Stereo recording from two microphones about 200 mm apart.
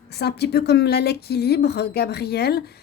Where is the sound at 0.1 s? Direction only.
55° left (ahead or behind).